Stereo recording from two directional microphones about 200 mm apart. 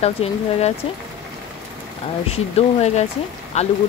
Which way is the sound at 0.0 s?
30° left (ahead or behind).